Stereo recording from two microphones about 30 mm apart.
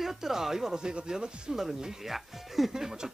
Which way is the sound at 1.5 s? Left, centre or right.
Centre.